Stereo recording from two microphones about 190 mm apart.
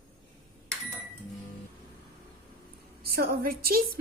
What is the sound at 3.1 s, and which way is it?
Speech, 50° right (ahead or behind).